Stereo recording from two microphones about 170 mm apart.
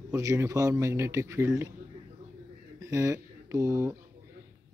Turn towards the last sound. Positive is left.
turn(degrees=-20)  # may be behind; listen again after turning